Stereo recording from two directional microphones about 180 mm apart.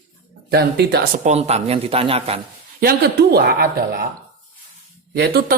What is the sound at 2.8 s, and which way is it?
Speech, 60° right (ahead or behind).